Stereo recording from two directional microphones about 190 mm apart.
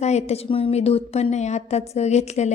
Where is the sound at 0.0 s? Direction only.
35° left (ahead or behind).